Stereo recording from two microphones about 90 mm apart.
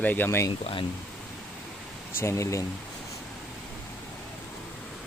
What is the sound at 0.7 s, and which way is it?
Speech, 90° left.